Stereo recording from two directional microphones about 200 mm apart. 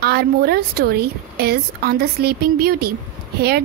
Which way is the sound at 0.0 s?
50° right (ahead or behind).